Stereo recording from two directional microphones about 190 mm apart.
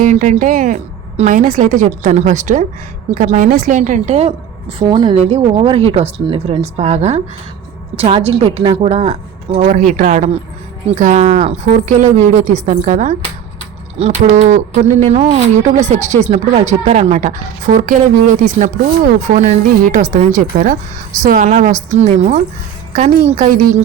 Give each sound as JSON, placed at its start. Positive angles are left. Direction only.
{"t": 0.0, "sound": "speech", "side_deg": -40}
{"t": 4.8, "sound": "a woman's voice", "side_deg": -25}